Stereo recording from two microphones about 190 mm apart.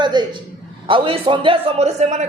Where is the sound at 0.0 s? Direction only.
25° right (ahead or behind).